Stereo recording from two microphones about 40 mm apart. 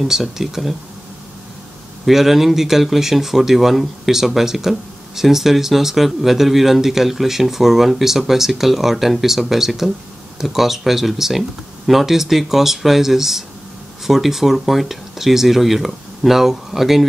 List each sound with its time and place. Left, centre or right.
0.0 s speech: centre
2.0 s speech: centre